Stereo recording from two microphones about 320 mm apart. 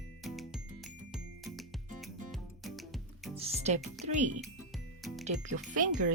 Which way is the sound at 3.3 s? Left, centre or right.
Centre.